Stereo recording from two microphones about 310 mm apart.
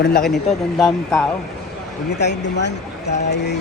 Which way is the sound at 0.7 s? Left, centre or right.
Centre.